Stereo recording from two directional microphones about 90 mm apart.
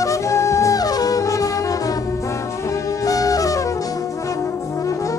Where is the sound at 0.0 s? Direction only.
35° left (ahead or behind).